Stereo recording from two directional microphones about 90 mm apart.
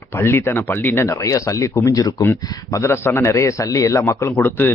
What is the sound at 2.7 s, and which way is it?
A man's voice, 30° left (ahead or behind).